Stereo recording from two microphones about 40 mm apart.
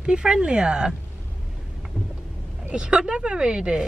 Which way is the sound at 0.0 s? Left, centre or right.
Right.